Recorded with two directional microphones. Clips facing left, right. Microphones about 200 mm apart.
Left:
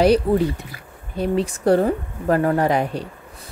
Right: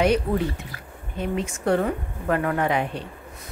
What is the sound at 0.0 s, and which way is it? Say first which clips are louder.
Speech: left 5 dB; 35° left (ahead or behind).